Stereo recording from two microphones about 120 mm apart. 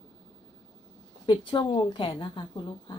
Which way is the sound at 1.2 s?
40° left (ahead or behind).